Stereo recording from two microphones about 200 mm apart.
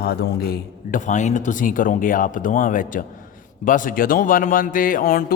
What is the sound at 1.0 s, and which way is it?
A man's voice, 35° left (ahead or behind).